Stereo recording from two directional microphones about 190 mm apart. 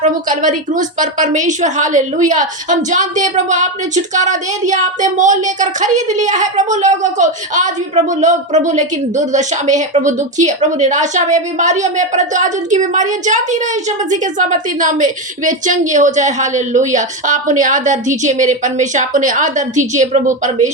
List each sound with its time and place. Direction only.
0.0 s a woman's voice: 40° right (ahead or behind)